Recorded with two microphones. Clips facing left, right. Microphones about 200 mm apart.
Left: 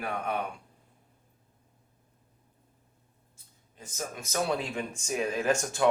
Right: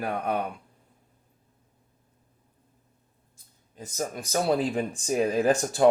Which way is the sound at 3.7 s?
40° right (ahead or behind).